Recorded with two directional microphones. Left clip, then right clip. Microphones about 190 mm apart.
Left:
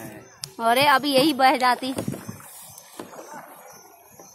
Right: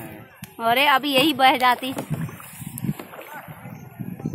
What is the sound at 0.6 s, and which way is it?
Speech, 15° left (ahead or behind).